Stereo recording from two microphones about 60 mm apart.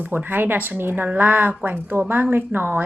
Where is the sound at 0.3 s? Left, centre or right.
Right.